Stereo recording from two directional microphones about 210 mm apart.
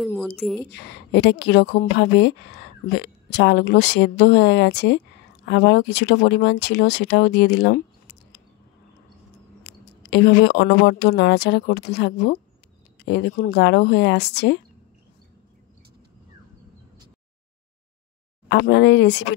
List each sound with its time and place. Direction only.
0.0 s a sound: centre (ahead or behind)
0.4 s speech: centre (ahead or behind)
0.7 s a woman's voice: 55° left (ahead or behind)
9.6 s speech: 55° left (ahead or behind)
18.5 s a woman's voice: 55° left (ahead or behind)